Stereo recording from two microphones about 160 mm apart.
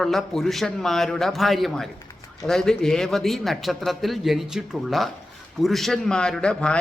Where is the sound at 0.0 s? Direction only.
Centre (ahead or behind).